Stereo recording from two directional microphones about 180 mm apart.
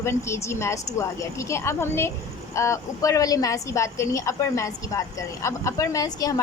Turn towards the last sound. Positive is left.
turn(degrees=20)  # may be behind; listen again after turning